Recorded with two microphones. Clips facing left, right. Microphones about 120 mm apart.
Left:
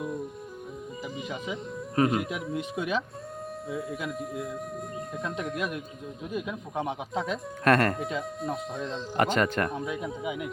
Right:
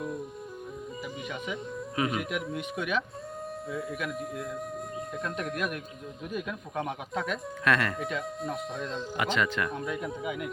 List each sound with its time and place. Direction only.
2.0 s speech: 30° left (ahead or behind)
5.5 s speech: 20° left (ahead or behind)
7.6 s speech: 45° left (ahead or behind)
8.4 s speech: centre (ahead or behind)
9.1 s speech: 45° left (ahead or behind)
9.6 s speech: 30° left (ahead or behind)
10.2 s speech: 15° left (ahead or behind)